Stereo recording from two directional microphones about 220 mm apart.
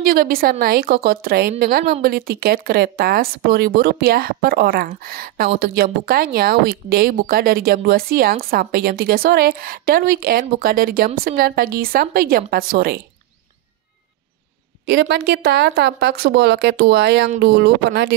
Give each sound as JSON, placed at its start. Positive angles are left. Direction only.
{"t": 0.0, "sound": "speech", "side_deg": -40}
{"t": 14.9, "sound": "speech", "side_deg": -50}